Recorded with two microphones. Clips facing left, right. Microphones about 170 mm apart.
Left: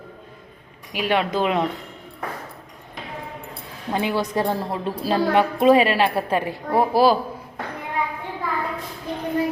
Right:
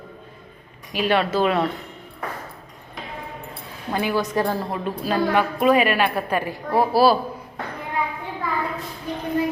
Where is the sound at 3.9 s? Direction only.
25° left (ahead or behind).